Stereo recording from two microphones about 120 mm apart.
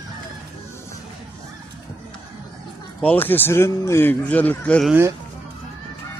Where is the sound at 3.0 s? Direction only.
15° left (ahead or behind).